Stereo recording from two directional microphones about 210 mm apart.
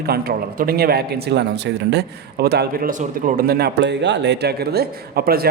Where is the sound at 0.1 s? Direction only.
45° right (ahead or behind).